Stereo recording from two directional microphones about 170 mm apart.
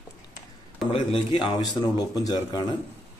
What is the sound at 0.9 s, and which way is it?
A man's voice, 30° left (ahead or behind).